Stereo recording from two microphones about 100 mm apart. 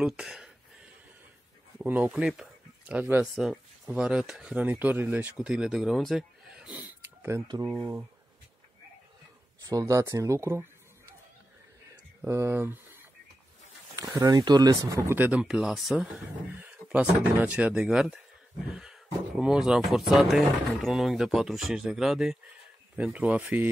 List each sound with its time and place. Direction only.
0.0 s speech: 5° right (ahead or behind)
1.8 s speech: 15° right (ahead or behind)
3.3 s a sound: centre (ahead or behind)
3.9 s speech: 10° right (ahead or behind)
5.5 s speech: 5° right (ahead or behind)
6.7 s sniff: 15° right (ahead or behind)
7.6 s speech: 40° right (ahead or behind)
9.6 s speech: 35° right (ahead or behind)
12.3 s speech: 25° right (ahead or behind)
13.9 s speech: 40° right (ahead or behind)
15.1 s speech: 20° right (ahead or behind)
15.4 s speech: 5° right (ahead or behind)
16.4 s speech: 20° right (ahead or behind)